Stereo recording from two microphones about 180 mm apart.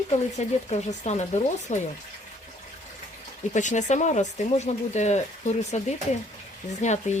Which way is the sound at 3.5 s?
40° left (ahead or behind).